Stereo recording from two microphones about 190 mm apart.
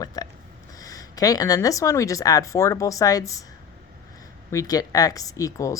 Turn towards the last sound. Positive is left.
turn(degrees=15)  # may be behind; listen again after turning